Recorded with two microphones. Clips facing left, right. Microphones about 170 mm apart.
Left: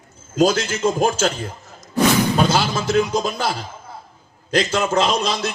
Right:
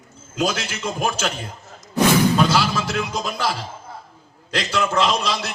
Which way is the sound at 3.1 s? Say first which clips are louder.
Left 3 dB; 45° left (ahead or behind).